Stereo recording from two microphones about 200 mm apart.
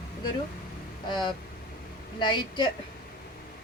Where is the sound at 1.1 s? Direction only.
25° left (ahead or behind).